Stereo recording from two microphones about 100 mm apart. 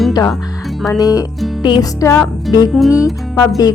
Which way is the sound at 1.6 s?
45° left (ahead or behind).